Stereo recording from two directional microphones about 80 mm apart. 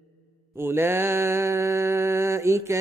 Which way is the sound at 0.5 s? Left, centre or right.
Right.